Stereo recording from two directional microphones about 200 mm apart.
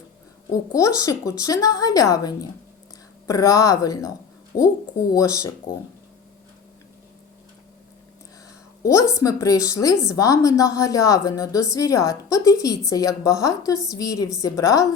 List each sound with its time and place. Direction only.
0.5 s a woman's voice: 15° left (ahead or behind)
8.8 s a woman's voice: 15° left (ahead or behind)